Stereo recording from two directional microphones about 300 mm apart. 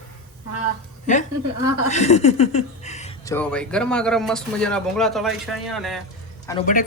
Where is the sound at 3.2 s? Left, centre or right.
Centre.